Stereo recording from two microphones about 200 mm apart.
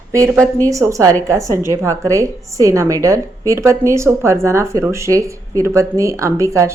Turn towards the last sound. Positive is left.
turn(degrees=-15)  # may be behind; listen again after turning